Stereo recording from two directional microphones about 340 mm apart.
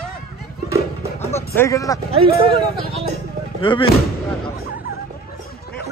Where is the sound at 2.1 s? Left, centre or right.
Centre.